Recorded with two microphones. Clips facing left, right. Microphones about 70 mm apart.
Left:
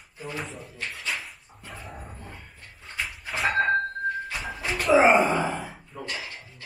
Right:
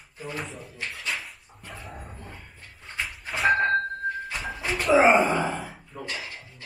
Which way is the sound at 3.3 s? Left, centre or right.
Centre.